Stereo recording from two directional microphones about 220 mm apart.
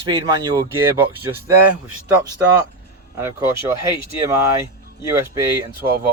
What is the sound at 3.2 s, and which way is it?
Speech, 10° right (ahead or behind).